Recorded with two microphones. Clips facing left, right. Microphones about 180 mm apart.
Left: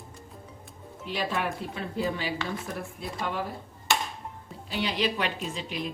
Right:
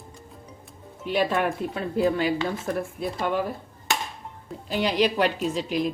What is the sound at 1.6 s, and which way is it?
Speech, 50° right (ahead or behind).